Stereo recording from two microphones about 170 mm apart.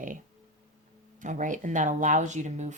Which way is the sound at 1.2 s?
45° right (ahead or behind).